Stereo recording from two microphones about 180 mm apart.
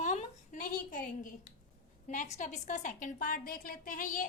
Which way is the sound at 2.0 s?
45° left (ahead or behind).